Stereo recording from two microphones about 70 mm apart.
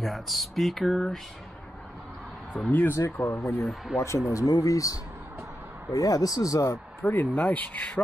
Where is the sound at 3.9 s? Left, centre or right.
Left.